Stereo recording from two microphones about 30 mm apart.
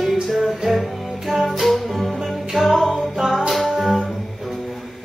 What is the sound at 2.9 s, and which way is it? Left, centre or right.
Music, centre.